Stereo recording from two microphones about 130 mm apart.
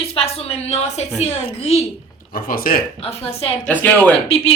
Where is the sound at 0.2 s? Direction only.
55° left (ahead or behind).